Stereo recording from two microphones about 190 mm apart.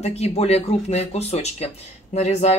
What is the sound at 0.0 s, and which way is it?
Speech, 35° left (ahead or behind).